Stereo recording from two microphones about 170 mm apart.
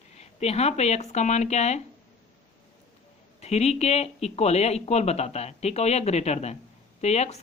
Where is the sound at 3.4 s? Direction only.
40° left (ahead or behind).